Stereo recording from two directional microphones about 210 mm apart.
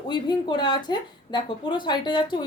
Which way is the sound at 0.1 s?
20° left (ahead or behind).